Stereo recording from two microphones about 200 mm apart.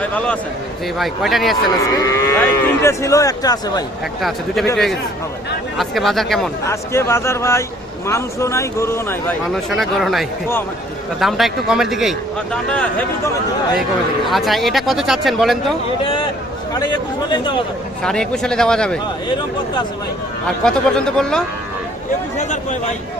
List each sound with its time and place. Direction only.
0.0 s cattle: 5° left (ahead or behind)
0.9 s a man's voice: centre (ahead or behind)
2.0 s cattle: 15° left (ahead or behind)
4.2 s a man's voice: centre (ahead or behind)
5.7 s speech: centre (ahead or behind)
6.7 s cattle: 15° left (ahead or behind)
9.6 s a man's voice: centre (ahead or behind)
14.3 s a man's voice: centre (ahead or behind)
16.7 s speech: 20° left (ahead or behind)
18.0 s a man's voice: 5° left (ahead or behind)
20.7 s a man's voice: 5° left (ahead or behind)
22.4 s speech: 35° left (ahead or behind)